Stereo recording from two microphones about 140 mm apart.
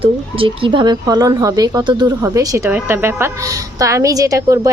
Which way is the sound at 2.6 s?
15° right (ahead or behind).